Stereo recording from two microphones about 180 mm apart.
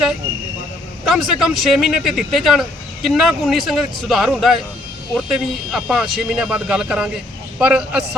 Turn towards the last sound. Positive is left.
turn(degrees=-5)  # may be behind; listen again after turning